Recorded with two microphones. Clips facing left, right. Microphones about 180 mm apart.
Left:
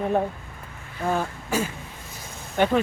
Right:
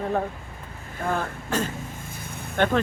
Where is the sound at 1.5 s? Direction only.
10° left (ahead or behind).